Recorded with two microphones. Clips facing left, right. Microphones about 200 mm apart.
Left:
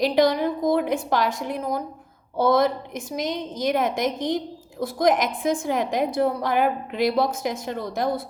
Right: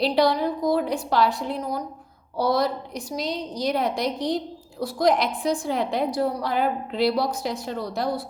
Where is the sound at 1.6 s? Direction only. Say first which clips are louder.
Left 2 dB; 50° left (ahead or behind).